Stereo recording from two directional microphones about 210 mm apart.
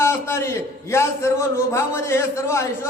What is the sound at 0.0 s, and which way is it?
A man's voice, 10° left (ahead or behind).